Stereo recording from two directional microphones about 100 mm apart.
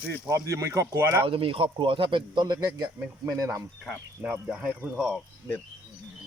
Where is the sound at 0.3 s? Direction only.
30° right (ahead or behind).